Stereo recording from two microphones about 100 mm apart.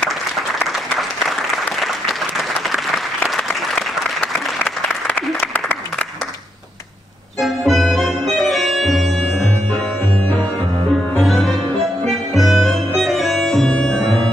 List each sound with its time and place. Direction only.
5.0 s applause: 20° left (ahead or behind)
7.3 s music: centre (ahead or behind)
11.1 s music: centre (ahead or behind)